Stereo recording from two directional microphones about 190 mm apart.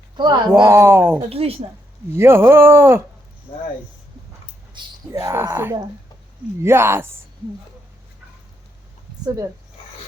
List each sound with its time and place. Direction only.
0.2 s speech: 25° right (ahead or behind)
0.7 s speech: 10° right (ahead or behind)
1.3 s a woman's voice: 30° right (ahead or behind)
2.1 s speech: 10° right (ahead or behind)
4.8 s a sound: 25° right (ahead or behind)
5.1 s speech: 15° right (ahead or behind)
9.2 s speech: 15° right (ahead or behind)